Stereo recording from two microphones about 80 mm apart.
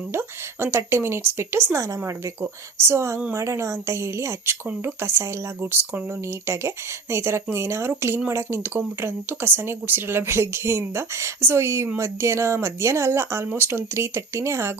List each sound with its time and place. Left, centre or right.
0.1 s speech: right
6.4 s speech: right